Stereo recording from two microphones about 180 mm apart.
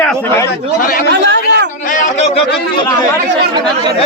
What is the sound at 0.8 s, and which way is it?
Speech, 50° left (ahead or behind).